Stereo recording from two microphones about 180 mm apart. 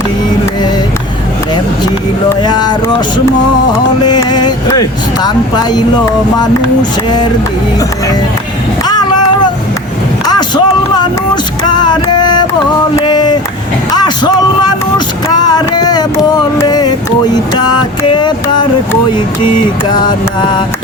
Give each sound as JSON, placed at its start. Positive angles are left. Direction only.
{"t": 2.4, "sound": "speech", "side_deg": 25}
{"t": 4.0, "sound": "speech", "side_deg": 25}
{"t": 10.2, "sound": "a sound", "side_deg": 20}
{"t": 11.7, "sound": "music", "side_deg": 25}
{"t": 13.1, "sound": "a sound", "side_deg": 25}
{"t": 13.9, "sound": "vehicle", "side_deg": 25}
{"t": 18.0, "sound": "speech", "side_deg": 25}
{"t": 19.9, "sound": "speech", "side_deg": 25}